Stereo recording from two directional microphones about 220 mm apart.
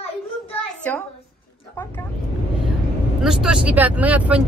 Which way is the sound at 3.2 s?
Centre (ahead or behind).